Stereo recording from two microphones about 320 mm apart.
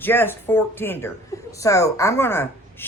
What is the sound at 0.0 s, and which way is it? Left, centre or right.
A woman's voice, centre.